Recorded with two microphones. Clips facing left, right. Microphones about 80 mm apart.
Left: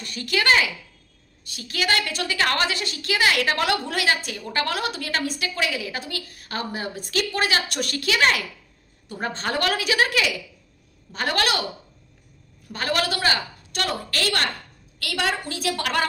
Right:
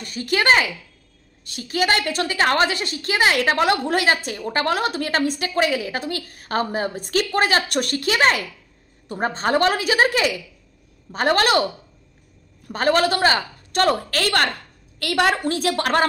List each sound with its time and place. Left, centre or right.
0.0 s a woman's voice: right
12.7 s a woman's voice: right